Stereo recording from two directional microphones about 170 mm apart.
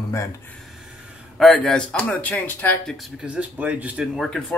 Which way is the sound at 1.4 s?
Centre (ahead or behind).